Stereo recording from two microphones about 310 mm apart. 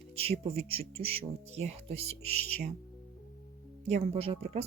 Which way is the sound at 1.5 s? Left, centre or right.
Centre.